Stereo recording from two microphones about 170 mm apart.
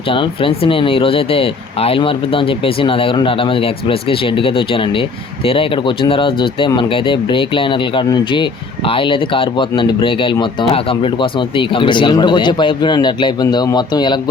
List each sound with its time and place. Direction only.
0.1 s speech: 30° left (ahead or behind)